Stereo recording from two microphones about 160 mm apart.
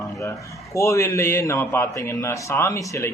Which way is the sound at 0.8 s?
20° left (ahead or behind).